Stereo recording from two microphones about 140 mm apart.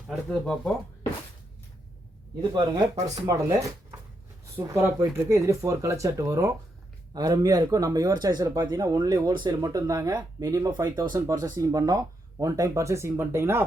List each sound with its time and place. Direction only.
0.1 s speech: centre (ahead or behind)
2.6 s speech: 25° right (ahead or behind)
9.6 s speech: 25° right (ahead or behind)